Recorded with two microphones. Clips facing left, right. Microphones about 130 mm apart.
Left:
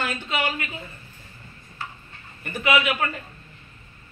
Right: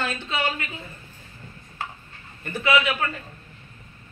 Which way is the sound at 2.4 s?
15° left (ahead or behind).